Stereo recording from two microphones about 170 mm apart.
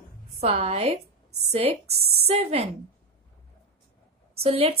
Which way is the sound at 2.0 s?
65° right (ahead or behind).